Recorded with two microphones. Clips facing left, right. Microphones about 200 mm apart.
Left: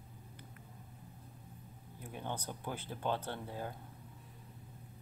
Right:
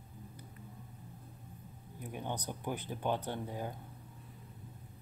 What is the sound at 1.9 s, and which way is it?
Speech, 15° right (ahead or behind).